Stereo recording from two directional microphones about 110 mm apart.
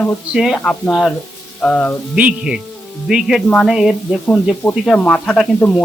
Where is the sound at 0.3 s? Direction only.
Centre (ahead or behind).